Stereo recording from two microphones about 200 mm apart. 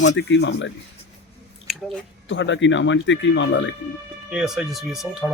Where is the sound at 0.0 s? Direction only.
65° left (ahead or behind).